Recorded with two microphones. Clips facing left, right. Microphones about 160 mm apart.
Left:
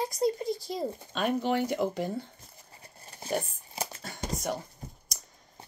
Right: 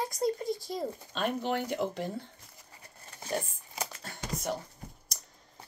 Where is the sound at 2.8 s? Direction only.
30° left (ahead or behind).